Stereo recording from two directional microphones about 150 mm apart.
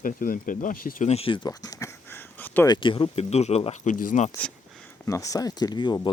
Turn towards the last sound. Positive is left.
turn(degrees=30)  # may be behind; listen again after turning